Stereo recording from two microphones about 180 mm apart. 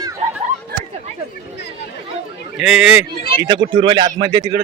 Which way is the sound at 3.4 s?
25° right (ahead or behind).